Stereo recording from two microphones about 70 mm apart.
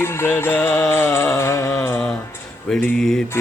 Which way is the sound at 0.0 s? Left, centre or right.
Left.